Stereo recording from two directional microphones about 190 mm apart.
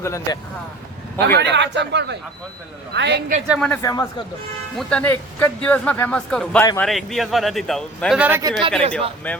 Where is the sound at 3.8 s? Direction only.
15° left (ahead or behind).